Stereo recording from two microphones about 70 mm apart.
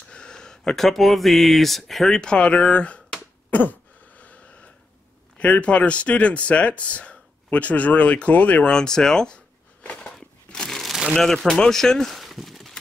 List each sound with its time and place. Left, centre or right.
0.1 s speech: centre
3.4 s a sound: left
5.4 s speech: centre
8.7 s speech: centre
10.1 s crumpling: centre
11.1 s speech: centre